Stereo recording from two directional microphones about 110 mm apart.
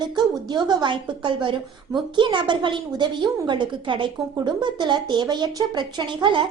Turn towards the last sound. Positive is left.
turn(degrees=-45)  # may be behind; listen again after turning